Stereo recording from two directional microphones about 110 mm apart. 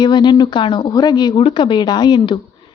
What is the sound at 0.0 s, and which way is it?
Speech, 45° left (ahead or behind).